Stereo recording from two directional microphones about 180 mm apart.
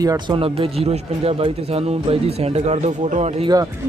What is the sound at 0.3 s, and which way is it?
Speech, 30° right (ahead or behind).